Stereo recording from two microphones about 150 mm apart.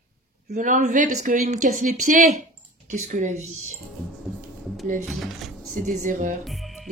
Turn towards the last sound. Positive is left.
turn(degrees=0)  # may be behind; listen again after turning